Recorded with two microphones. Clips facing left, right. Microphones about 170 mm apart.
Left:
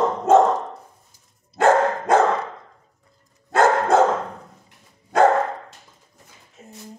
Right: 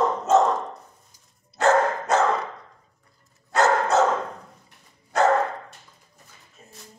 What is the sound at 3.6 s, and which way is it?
Dog, 55° left (ahead or behind).